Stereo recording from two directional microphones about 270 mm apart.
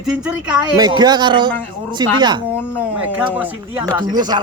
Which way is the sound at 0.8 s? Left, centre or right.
Centre.